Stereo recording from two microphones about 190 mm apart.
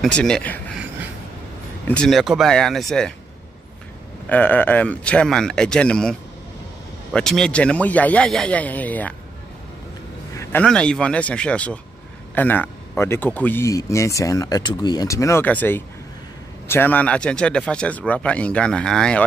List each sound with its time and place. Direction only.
0.0 s speech: 5° left (ahead or behind)
1.9 s speech: 5° left (ahead or behind)
4.3 s speech: 10° left (ahead or behind)
10.3 s speech: 15° left (ahead or behind)